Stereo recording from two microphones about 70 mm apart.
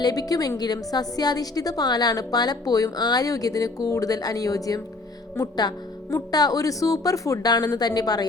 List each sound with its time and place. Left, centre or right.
0.0 s a woman's voice: left
6.3 s a woman's voice: left